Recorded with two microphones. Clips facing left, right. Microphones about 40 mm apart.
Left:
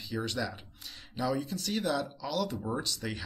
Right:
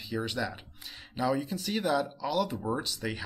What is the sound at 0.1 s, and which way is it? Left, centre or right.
Speech, centre.